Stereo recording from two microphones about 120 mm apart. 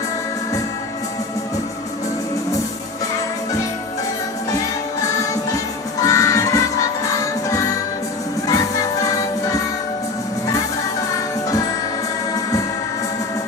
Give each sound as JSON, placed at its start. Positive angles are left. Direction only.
{"t": 6.0, "sound": "music", "side_deg": 25}